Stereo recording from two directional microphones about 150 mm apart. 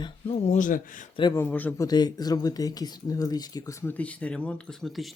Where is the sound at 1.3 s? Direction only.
10° left (ahead or behind).